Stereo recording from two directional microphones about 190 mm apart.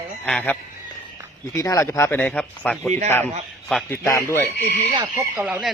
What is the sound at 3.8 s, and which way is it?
Speech, 15° left (ahead or behind).